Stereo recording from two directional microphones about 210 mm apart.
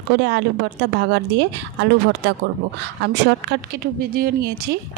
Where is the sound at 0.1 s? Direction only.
55° right (ahead or behind).